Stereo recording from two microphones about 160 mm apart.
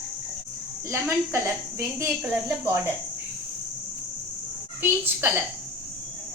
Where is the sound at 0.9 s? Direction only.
15° right (ahead or behind).